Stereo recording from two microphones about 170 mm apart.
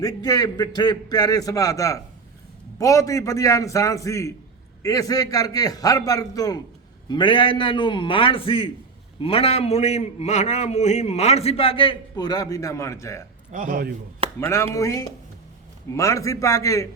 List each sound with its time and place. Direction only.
0.2 s a man's voice: 25° left (ahead or behind)
13.5 s a man's voice: 55° right (ahead or behind)
14.3 s a man's voice: 15° left (ahead or behind)